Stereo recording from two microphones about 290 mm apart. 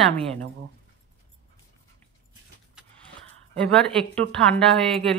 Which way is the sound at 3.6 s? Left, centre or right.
Centre.